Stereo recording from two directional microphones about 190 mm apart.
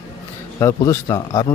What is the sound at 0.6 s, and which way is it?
Speech, 15° left (ahead or behind).